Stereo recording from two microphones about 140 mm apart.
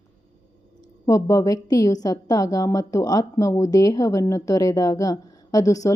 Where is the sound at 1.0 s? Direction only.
25° left (ahead or behind).